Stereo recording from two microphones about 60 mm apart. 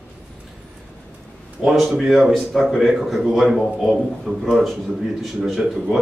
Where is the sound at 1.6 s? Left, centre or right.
Centre.